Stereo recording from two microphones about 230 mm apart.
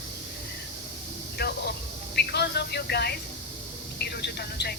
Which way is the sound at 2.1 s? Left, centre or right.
Left.